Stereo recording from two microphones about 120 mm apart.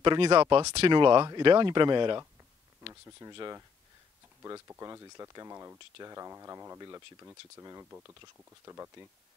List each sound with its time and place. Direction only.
0.0 s speech: 45° right (ahead or behind)
2.9 s speech: 25° right (ahead or behind)